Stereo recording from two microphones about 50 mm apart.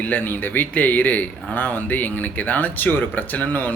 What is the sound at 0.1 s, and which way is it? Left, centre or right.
Speech, left.